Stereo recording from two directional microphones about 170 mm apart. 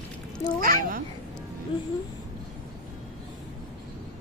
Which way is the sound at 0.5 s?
55° right (ahead or behind).